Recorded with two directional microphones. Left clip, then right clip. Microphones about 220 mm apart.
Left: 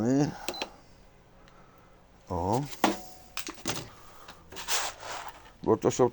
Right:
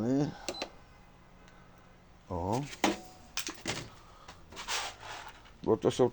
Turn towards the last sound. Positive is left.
turn(degrees=10)  # may be behind; listen again after turning